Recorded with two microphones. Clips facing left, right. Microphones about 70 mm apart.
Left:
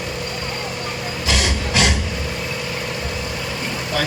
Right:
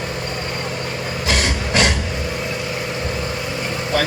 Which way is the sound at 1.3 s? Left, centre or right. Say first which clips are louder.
Right 1 dB; right.